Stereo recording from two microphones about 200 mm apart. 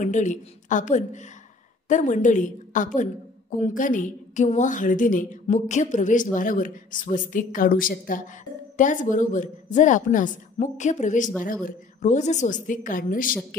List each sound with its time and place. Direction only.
0.0 s a woman's voice: 40° left (ahead or behind)